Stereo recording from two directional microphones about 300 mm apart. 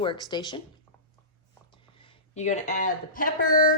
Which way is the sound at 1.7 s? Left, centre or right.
Centre.